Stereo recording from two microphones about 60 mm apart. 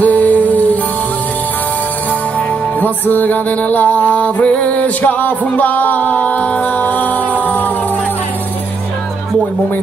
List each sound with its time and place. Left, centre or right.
0.0 s music: left
2.8 s music: left